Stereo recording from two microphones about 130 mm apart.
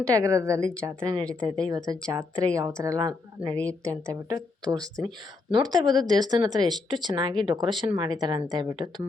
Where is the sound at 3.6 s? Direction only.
10° left (ahead or behind).